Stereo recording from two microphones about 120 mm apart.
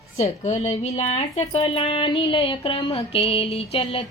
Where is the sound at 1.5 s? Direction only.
55° left (ahead or behind).